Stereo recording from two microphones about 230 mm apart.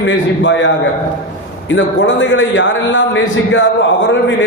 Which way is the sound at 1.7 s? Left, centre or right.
Left.